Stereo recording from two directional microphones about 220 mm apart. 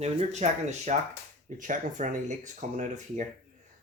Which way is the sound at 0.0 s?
30° right (ahead or behind).